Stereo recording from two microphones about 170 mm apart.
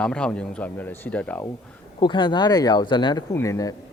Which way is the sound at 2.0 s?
25° left (ahead or behind).